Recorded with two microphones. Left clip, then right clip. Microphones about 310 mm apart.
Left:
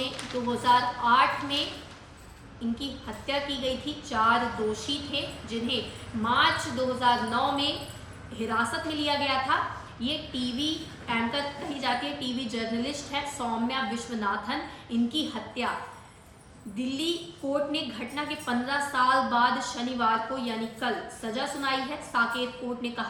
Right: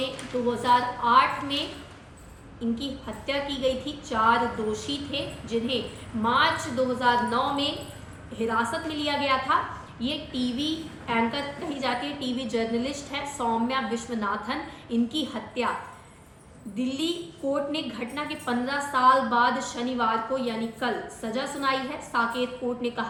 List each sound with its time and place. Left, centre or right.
0.6 s a woman's voice: centre
2.7 s a woman's voice: centre
16.7 s a woman's voice: centre